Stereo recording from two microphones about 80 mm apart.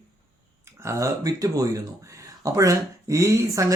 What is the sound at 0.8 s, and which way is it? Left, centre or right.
Speech, right.